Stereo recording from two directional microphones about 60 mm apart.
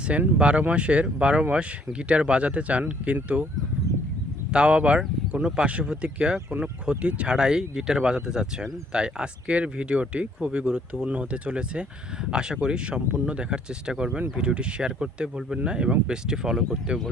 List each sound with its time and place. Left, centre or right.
0.1 s speech: centre
4.5 s speech: centre